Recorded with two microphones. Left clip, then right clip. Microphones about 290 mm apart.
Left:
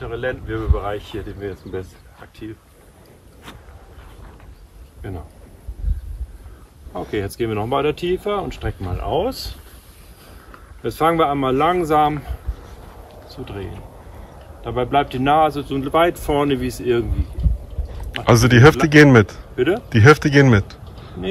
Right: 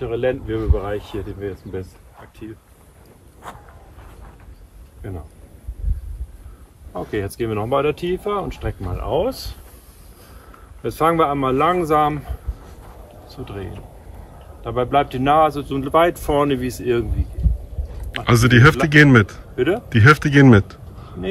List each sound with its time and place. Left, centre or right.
0.7 s speech: left
5.0 s speech: centre
6.9 s speech: centre
10.8 s speech: centre
13.5 s speech: centre